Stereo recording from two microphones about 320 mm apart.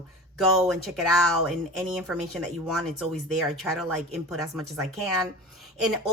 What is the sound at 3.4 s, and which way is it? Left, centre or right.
Speech, centre.